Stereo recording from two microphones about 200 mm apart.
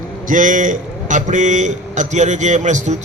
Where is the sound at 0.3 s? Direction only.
40° right (ahead or behind).